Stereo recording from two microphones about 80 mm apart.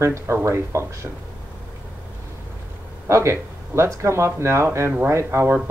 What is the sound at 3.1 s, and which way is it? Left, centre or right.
Speech, right.